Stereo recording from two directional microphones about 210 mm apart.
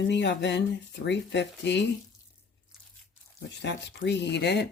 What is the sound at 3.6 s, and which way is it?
Speech, 55° left (ahead or behind).